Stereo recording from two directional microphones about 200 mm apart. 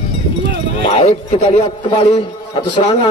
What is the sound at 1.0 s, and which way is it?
Speech, 30° left (ahead or behind).